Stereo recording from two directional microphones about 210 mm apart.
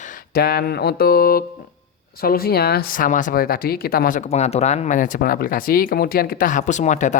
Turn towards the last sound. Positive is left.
turn(degrees=35)  # may be behind; listen again after turning